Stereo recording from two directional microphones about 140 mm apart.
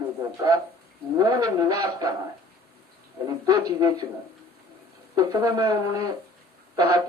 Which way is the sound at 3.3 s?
25° right (ahead or behind).